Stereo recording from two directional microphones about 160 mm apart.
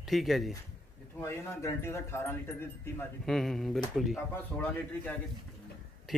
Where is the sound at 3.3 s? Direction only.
Centre (ahead or behind).